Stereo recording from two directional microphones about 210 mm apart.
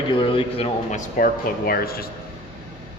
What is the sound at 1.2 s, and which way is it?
Speech, 45° left (ahead or behind).